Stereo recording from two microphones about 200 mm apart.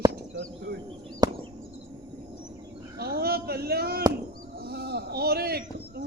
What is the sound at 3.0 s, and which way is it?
Speech, 50° right (ahead or behind).